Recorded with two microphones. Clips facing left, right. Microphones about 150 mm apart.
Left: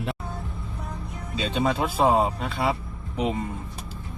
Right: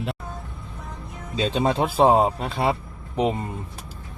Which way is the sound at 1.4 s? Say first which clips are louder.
Right 3 dB; centre (ahead or behind).